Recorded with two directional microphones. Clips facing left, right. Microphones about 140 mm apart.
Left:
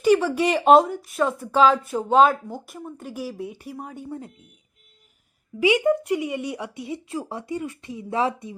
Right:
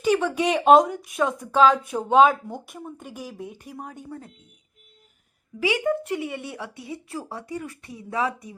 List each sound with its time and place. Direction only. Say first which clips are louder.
0.0 s speech: left 3 dB; 10° left (ahead or behind)
5.5 s speech: left 4 dB; 15° left (ahead or behind)